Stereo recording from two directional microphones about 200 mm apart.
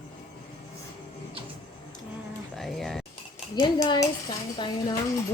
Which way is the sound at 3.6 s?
20° left (ahead or behind).